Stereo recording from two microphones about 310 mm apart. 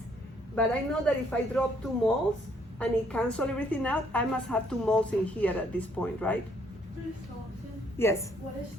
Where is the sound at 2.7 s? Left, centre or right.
Centre.